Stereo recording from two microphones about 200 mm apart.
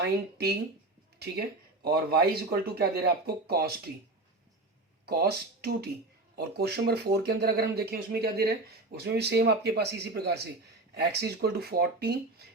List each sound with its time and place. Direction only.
0.0 s speech: 55° right (ahead or behind)
1.8 s speech: 50° right (ahead or behind)
5.0 s speech: 50° right (ahead or behind)